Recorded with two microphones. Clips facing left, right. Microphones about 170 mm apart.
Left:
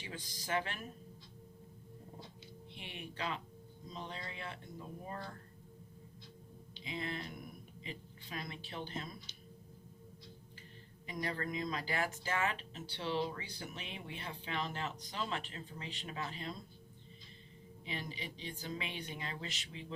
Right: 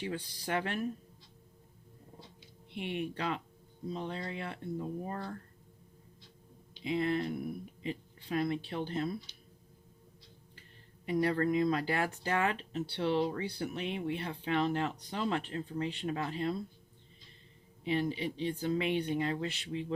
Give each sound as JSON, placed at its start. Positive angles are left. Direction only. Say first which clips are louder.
{"t": 0.0, "sound": "speech", "louder": "right 10 dB", "side_deg": -60}
{"t": 2.7, "sound": "speech", "louder": "right 11 dB", "side_deg": -55}
{"t": 5.0, "sound": "speech", "louder": "right 5 dB", "side_deg": -45}
{"t": 6.8, "sound": "speech", "louder": "right 11 dB", "side_deg": -55}
{"t": 11.0, "sound": "speech", "louder": "right 11 dB", "side_deg": -60}
{"t": 17.8, "sound": "speech", "louder": "right 12 dB", "side_deg": -60}